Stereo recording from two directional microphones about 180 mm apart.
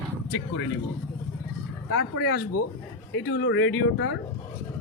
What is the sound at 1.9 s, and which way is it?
Speech, 80° left.